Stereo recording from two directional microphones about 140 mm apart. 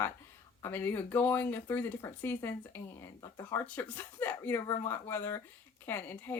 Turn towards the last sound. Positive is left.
turn(degrees=15)  # may be behind; listen again after turning